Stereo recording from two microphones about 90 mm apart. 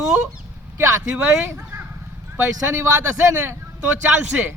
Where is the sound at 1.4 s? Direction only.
25° right (ahead or behind).